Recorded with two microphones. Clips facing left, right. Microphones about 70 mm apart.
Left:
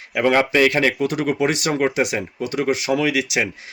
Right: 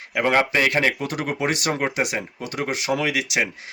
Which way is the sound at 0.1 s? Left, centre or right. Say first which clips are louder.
Left 3 dB; right.